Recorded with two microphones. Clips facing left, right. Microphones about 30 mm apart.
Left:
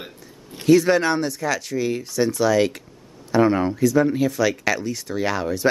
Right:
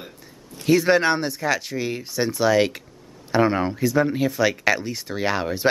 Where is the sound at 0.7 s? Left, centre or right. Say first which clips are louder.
Left 1 dB; centre.